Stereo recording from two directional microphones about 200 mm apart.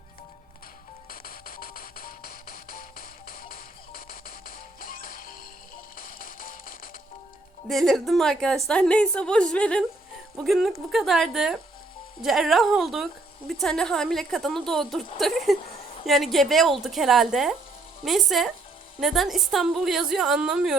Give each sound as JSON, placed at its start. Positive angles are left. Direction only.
{"t": 1.1, "sound": "music", "side_deg": 45}
{"t": 7.7, "sound": "a woman's voice", "side_deg": 0}